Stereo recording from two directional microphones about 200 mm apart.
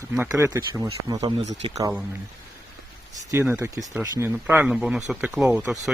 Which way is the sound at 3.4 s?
10° right (ahead or behind).